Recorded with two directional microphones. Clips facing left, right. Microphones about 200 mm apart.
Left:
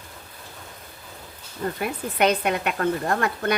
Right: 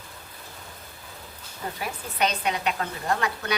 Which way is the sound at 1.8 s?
55° left (ahead or behind).